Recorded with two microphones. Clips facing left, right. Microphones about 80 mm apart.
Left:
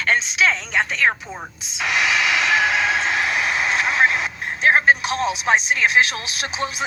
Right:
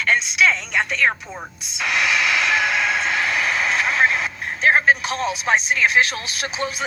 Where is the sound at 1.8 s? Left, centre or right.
Left.